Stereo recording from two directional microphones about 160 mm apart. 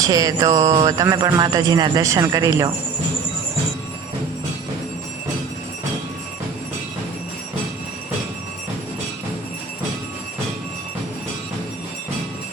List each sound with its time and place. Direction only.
0.0 s music: 25° right (ahead or behind)